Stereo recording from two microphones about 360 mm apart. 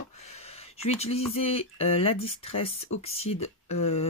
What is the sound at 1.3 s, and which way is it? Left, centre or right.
Speech, centre.